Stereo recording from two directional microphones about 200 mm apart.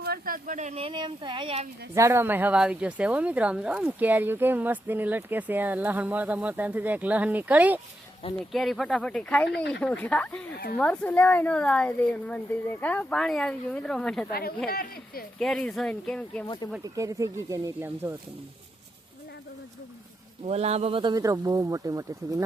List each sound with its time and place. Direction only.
0.0 s speech: 50° right (ahead or behind); by 1.6 s 25° right (ahead or behind)
2.0 s a woman's voice: 15° right (ahead or behind); by 14.3 s 5° left (ahead or behind)
14.7 s speech: 50° left (ahead or behind)
15.4 s speech: centre (ahead or behind)
16.8 s speech: 15° right (ahead or behind)
20.4 s speech: 30° right (ahead or behind)